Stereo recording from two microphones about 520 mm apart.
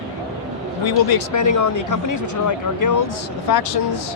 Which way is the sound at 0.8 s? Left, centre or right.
Left.